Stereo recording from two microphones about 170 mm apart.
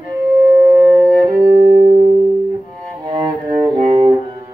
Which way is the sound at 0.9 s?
20° right (ahead or behind).